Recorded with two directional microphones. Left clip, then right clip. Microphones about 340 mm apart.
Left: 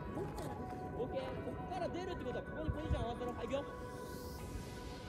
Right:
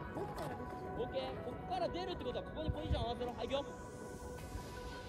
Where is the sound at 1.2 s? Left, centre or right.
Right.